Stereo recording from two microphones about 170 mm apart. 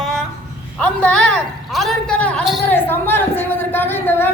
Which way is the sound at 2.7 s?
10° left (ahead or behind).